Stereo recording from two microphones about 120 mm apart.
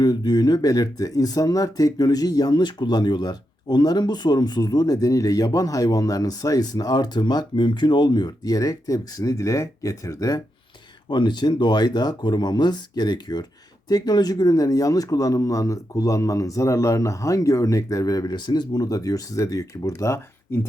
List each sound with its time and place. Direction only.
0.0 s a man's voice: 35° left (ahead or behind)